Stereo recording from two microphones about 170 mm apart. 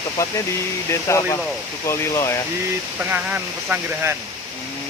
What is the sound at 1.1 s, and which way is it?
Speech, 15° left (ahead or behind).